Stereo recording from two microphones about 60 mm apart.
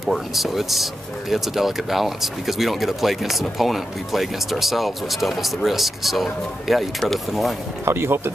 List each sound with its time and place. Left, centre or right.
0.0 s speech: centre
7.8 s speech: right